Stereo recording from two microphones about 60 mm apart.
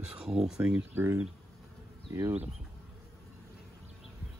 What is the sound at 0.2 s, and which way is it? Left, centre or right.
Speech, centre.